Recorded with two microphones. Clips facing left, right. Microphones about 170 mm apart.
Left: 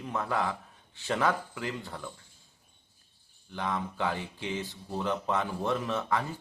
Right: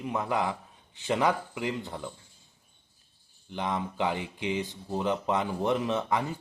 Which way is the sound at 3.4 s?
20° right (ahead or behind).